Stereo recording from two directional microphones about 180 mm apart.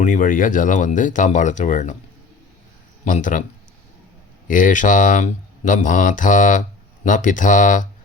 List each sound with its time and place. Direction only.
0.0 s speech: 45° left (ahead or behind)
3.0 s speech: 45° left (ahead or behind)
4.4 s speech: 45° left (ahead or behind)